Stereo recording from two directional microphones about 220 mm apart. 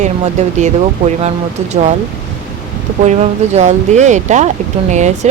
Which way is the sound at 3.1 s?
30° right (ahead or behind).